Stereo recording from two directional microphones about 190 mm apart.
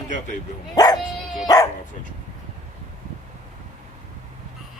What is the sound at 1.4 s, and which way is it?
Speech, 20° left (ahead or behind).